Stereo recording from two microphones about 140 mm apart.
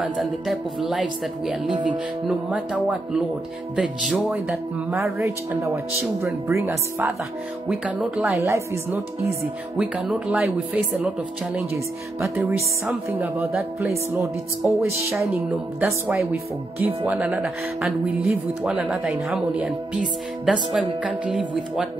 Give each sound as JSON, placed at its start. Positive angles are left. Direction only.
{"t": 0.0, "sound": "speech", "side_deg": 0}
{"t": 5.5, "sound": "speech", "side_deg": -20}
{"t": 7.6, "sound": "speech", "side_deg": -5}
{"t": 8.4, "sound": "speech", "side_deg": -20}
{"t": 9.8, "sound": "speech", "side_deg": -10}
{"t": 12.2, "sound": "speech", "side_deg": -5}